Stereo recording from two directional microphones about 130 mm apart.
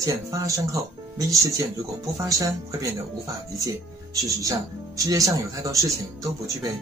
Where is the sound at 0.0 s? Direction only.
25° right (ahead or behind).